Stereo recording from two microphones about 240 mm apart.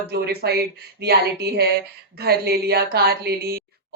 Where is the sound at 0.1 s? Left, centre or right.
Right.